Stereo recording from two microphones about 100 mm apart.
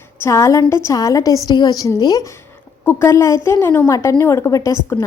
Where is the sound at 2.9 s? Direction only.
25° left (ahead or behind).